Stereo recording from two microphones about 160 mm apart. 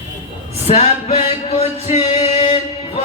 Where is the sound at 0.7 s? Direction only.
40° left (ahead or behind).